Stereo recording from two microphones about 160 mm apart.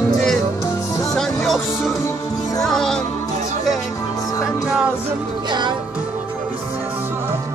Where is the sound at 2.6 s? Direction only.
5° left (ahead or behind).